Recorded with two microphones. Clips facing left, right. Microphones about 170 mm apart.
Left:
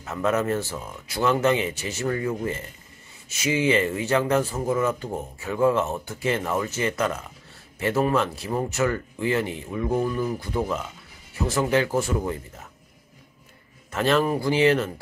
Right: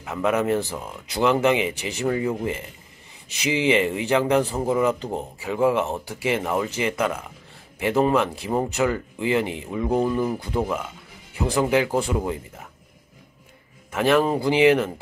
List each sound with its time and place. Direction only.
0.0 s speech: 10° right (ahead or behind)
13.9 s speech: 10° right (ahead or behind)